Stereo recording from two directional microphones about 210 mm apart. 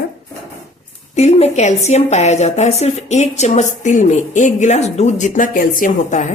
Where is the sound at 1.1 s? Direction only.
30° left (ahead or behind).